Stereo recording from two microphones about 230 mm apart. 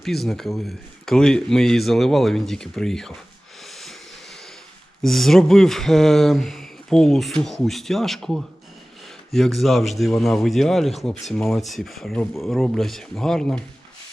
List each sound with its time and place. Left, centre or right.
0.0 s speech: centre
3.6 s vehicle: centre
5.0 s speech: centre